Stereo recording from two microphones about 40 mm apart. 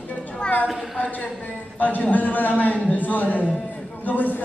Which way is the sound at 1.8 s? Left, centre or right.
Left.